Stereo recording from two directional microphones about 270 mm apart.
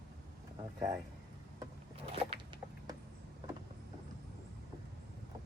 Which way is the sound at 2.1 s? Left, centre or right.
Centre.